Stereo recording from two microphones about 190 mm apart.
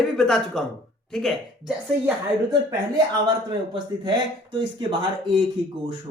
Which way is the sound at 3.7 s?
25° right (ahead or behind).